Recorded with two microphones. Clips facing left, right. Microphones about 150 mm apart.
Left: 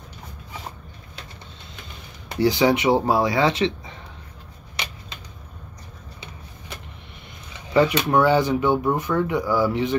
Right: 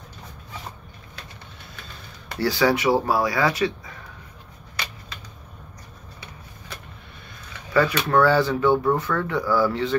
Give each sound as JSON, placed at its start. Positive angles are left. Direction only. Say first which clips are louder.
{"t": 1.8, "sound": "speech", "louder": "left 1 dB", "side_deg": 20}
{"t": 4.8, "sound": "a sound", "louder": "left 1 dB", "side_deg": 20}
{"t": 7.5, "sound": "speech", "louder": "left 2 dB", "side_deg": 20}